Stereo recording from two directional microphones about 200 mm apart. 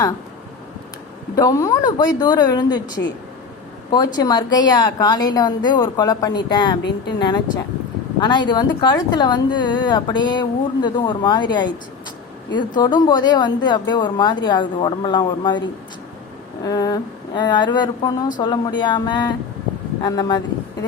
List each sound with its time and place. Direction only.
1.4 s a woman's voice: 20° left (ahead or behind)